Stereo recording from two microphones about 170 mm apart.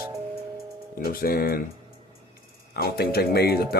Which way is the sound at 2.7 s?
70° left (ahead or behind).